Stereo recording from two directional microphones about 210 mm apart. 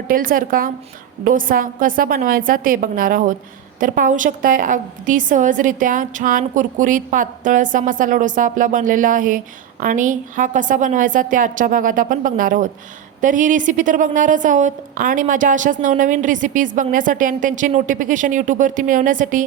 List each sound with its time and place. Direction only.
0.1 s a woman's voice: 40° right (ahead or behind)